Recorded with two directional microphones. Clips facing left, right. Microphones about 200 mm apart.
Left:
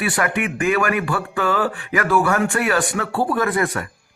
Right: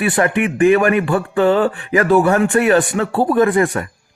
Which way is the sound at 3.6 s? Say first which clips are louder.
Right 5 dB; 30° right (ahead or behind).